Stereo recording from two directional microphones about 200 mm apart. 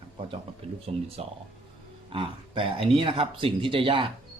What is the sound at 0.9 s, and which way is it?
Speech, 30° right (ahead or behind).